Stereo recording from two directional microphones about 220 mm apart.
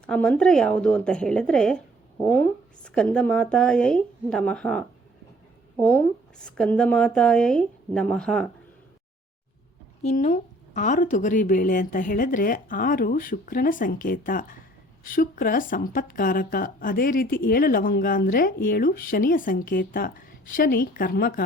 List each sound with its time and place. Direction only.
0.0 s speech: 5° left (ahead or behind)
2.8 s speech: 5° left (ahead or behind)
10.0 s speech: 30° left (ahead or behind)